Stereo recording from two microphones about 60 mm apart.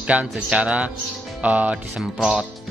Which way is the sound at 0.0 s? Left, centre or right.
Centre.